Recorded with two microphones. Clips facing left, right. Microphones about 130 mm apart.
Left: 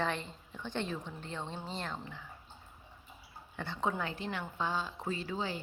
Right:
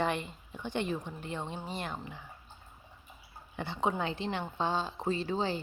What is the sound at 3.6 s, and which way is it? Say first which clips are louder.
Speech: right 3 dB; 15° right (ahead or behind).